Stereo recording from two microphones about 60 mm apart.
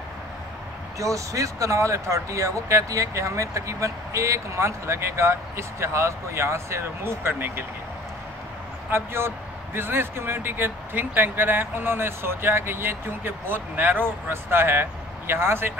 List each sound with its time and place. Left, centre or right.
0.9 s speech: right
8.9 s speech: right